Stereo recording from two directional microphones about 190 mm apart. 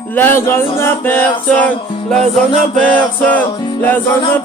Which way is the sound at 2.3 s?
5° left (ahead or behind).